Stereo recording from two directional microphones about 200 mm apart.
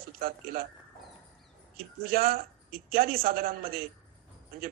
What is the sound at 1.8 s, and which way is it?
A man's voice, 45° right (ahead or behind).